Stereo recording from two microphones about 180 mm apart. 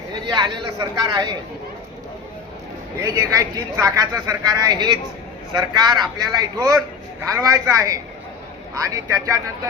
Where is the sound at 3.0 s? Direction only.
20° right (ahead or behind).